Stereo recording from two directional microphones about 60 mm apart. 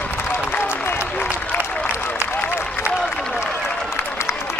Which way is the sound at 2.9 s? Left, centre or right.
Centre.